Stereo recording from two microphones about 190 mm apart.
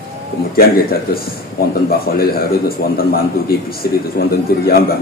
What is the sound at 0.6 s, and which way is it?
A man's voice, 50° left (ahead or behind).